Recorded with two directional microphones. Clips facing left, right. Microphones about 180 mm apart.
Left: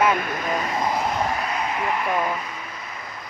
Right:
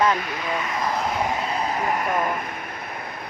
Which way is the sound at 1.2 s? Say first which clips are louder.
Even; 20° right (ahead or behind).